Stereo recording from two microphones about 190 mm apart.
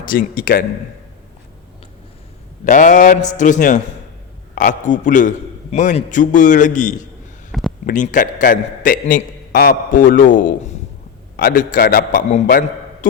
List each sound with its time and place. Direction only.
0.0 s a man's voice: 50° left (ahead or behind)
2.6 s a man's voice: 40° left (ahead or behind)
7.5 s a sound: centre (ahead or behind)
7.9 s a man's voice: 40° left (ahead or behind)